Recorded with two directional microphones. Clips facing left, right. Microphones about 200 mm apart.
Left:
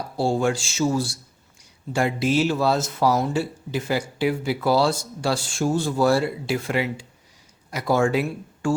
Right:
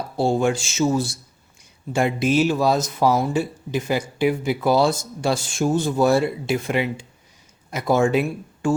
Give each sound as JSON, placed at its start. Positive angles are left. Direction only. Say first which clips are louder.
{"t": 0.2, "sound": "speech", "louder": "right 2 dB", "side_deg": -20}